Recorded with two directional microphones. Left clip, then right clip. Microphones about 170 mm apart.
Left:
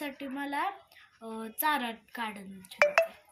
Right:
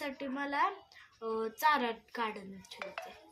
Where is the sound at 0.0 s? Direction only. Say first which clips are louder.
Left 1 dB; 15° right (ahead or behind).